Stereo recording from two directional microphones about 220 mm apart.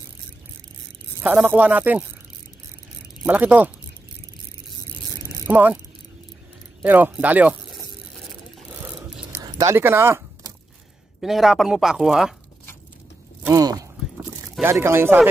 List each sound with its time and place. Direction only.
1.2 s speech: 5° right (ahead or behind)
3.3 s speech: 5° right (ahead or behind)
5.5 s speech: 5° right (ahead or behind)
6.8 s speech: 5° right (ahead or behind)
8.7 s ratchet: 10° right (ahead or behind)
9.5 s speech: 15° right (ahead or behind)
11.1 s speech: centre (ahead or behind)
13.4 s speech: 15° right (ahead or behind)